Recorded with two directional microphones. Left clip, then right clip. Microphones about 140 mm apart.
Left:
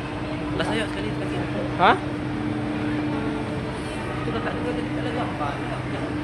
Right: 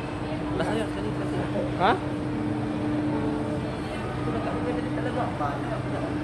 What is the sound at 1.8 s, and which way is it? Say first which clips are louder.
Speech: left 5 dB; 35° left (ahead or behind).